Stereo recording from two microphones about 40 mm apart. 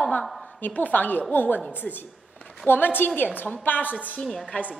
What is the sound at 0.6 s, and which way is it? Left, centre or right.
A woman's voice, left.